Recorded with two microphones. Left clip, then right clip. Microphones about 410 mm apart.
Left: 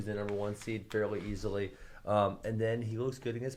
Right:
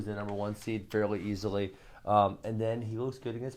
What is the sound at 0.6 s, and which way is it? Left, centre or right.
Speech, right.